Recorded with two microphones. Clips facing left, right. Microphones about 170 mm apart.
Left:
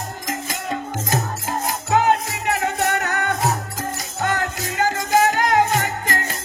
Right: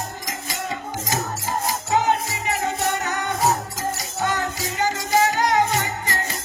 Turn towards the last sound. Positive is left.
turn(degrees=50)  # may be behind; listen again after turning